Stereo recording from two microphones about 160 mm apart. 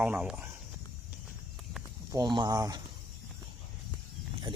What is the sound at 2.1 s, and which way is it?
Speech, 25° right (ahead or behind).